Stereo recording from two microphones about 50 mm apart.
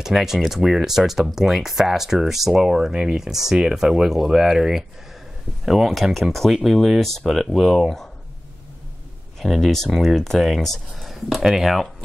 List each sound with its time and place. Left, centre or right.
0.0 s speech: centre
3.3 s speech: centre
9.4 s speech: centre